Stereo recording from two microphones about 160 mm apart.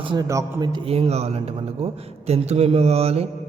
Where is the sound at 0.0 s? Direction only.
30° right (ahead or behind).